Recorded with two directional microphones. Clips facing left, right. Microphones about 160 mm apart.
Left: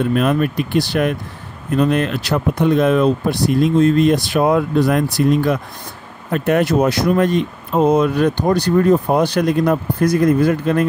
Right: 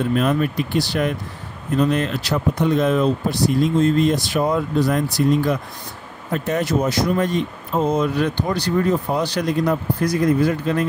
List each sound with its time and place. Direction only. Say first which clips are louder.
0.1 s speech: left 3 dB; 60° left (ahead or behind)